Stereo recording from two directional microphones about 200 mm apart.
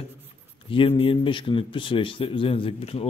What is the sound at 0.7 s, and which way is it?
A man's voice, 30° left (ahead or behind).